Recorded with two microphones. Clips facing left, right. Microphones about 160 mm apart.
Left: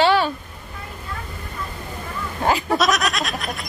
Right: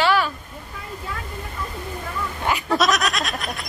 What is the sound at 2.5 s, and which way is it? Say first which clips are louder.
Goat: left 4 dB; 30° left (ahead or behind).